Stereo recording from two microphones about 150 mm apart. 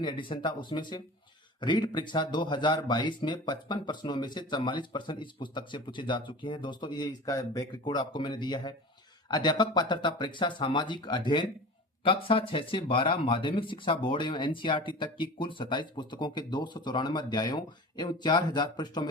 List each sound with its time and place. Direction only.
0.0 s speech: 30° left (ahead or behind)